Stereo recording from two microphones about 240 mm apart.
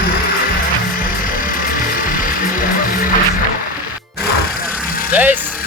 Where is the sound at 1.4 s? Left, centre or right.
Left.